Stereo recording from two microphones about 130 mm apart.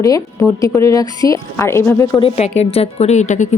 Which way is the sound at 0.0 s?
25° left (ahead or behind).